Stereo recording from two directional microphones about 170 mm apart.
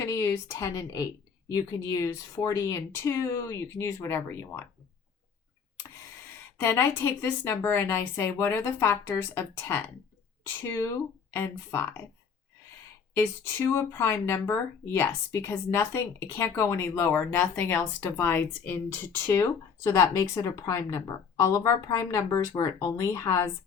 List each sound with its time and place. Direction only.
0.0 s speech: 15° left (ahead or behind)
6.6 s speech: 15° left (ahead or behind)
13.1 s speech: 15° left (ahead or behind)